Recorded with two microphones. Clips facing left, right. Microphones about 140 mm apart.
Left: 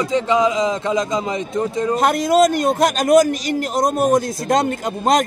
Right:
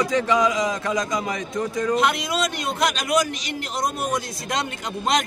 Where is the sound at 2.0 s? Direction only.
45° left (ahead or behind).